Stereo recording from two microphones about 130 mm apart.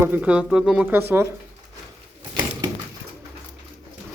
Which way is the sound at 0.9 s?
15° right (ahead or behind).